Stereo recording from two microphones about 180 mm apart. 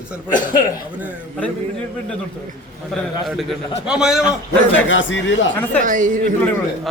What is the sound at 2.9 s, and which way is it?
A man's voice, centre (ahead or behind).